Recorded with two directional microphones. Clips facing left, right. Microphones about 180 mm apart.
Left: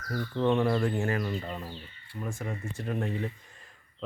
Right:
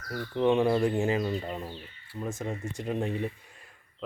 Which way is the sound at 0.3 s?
15° right (ahead or behind).